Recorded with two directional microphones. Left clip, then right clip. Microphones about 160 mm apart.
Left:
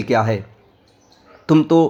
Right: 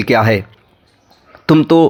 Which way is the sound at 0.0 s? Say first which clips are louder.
Right 6 dB; 30° right (ahead or behind).